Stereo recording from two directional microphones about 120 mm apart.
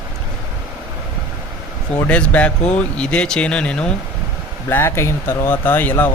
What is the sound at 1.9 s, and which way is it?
Speech, 10° left (ahead or behind).